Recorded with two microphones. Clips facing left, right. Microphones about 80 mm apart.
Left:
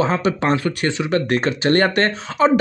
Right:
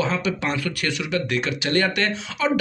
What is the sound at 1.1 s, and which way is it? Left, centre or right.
Speech, left.